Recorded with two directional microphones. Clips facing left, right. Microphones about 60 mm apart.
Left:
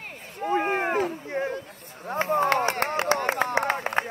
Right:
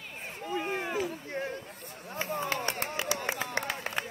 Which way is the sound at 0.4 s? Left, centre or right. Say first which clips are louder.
Left 9 dB; left.